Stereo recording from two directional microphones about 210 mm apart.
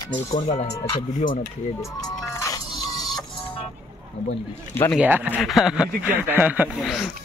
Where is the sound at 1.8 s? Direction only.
15° left (ahead or behind).